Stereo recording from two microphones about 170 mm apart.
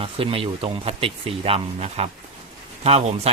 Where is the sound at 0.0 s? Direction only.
35° right (ahead or behind).